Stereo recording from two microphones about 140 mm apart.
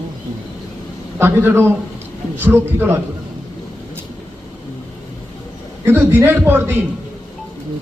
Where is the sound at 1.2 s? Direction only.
15° right (ahead or behind).